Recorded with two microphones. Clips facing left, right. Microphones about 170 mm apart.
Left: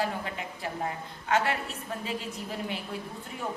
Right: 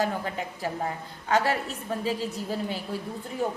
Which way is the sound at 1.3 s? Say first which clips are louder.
Right 3 dB; 35° right (ahead or behind).